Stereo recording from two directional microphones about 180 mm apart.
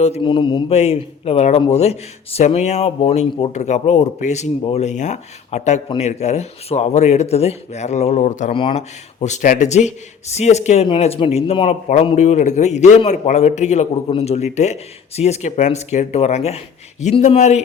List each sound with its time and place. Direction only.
0.0 s speech: 30° left (ahead or behind)
8.5 s speech: 30° left (ahead or behind)
9.2 s speech: 40° left (ahead or behind)